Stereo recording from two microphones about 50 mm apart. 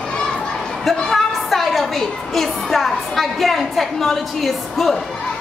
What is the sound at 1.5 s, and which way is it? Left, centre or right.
A woman's voice, centre.